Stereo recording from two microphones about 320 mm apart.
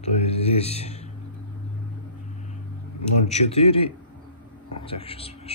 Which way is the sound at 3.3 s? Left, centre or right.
Centre.